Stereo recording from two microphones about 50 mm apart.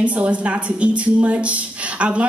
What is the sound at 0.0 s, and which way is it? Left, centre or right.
A woman's voice, right.